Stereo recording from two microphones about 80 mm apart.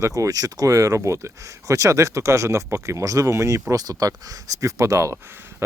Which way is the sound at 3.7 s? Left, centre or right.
Right.